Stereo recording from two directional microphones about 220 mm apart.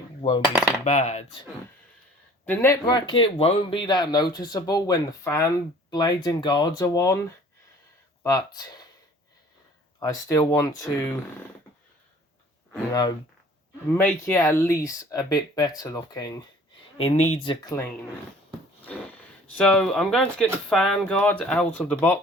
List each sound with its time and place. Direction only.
0.2 s coin: 20° left (ahead or behind)
0.9 s speech: 30° left (ahead or behind)
2.5 s speech: 10° left (ahead or behind)
10.0 s speech: 15° left (ahead or behind)
12.9 s speech: 15° left (ahead or behind)
17.0 s speech: 30° left (ahead or behind); by 17.9 s 15° left (ahead or behind)
19.5 s speech: 5° left (ahead or behind)